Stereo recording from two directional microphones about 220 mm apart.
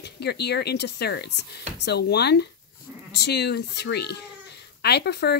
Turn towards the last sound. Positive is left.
turn(degrees=50)  # may be behind; listen again after turning